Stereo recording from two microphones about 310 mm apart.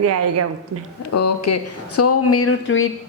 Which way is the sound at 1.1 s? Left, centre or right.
Left.